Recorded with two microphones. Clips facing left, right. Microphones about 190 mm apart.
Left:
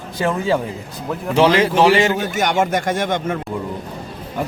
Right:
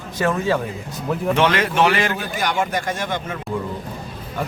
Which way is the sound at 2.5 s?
50° left (ahead or behind).